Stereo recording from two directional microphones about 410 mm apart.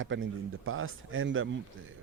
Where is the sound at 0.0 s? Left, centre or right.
Right.